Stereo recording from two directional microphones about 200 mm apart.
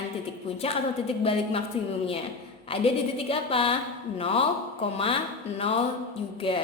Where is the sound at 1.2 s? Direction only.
30° left (ahead or behind).